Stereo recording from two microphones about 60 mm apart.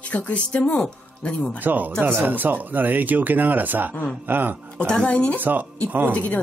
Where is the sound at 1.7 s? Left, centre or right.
Right.